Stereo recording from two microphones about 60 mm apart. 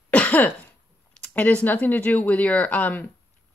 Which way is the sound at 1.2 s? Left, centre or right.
Left.